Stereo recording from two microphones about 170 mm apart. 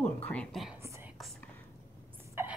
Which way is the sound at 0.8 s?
15° right (ahead or behind).